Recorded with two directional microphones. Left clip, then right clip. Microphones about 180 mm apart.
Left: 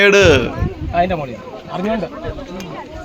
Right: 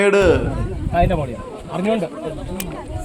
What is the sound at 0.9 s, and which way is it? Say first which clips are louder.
Speech: left 2 dB; 30° right (ahead or behind).